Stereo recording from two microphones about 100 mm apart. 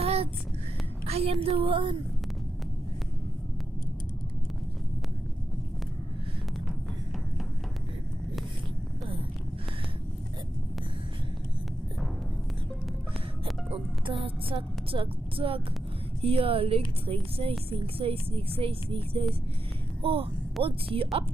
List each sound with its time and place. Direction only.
0.0 s a sound: 90° right
1.0 s a woman's voice: 90° right; by 2.0 s 60° right (ahead or behind)
14.0 s speech: 65° right (ahead or behind)